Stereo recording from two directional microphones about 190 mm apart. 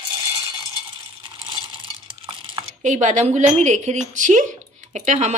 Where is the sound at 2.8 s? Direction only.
40° right (ahead or behind).